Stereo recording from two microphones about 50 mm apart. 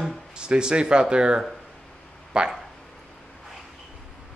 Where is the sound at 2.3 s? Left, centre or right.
Centre.